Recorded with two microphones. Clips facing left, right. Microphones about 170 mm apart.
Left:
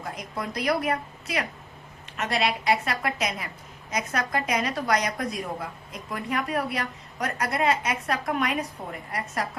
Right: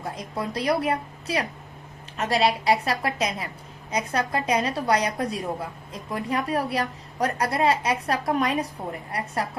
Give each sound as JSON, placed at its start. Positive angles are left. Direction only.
{"t": 0.0, "sound": "a woman's voice", "side_deg": -30}